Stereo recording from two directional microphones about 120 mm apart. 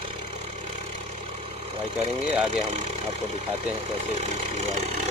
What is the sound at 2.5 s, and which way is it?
Speech, 65° right (ahead or behind).